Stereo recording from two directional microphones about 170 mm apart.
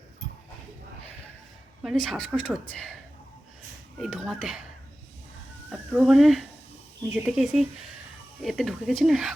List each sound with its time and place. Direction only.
1.8 s a woman's voice: centre (ahead or behind)
3.9 s a woman's voice: centre (ahead or behind)
5.7 s a woman's voice: 10° right (ahead or behind)